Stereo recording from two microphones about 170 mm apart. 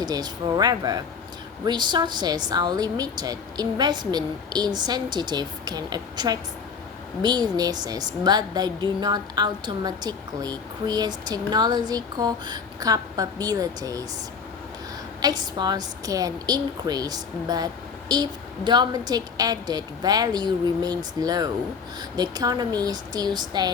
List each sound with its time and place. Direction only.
0.0 s a woman's voice: 25° right (ahead or behind)
15.2 s a woman's voice: 25° right (ahead or behind)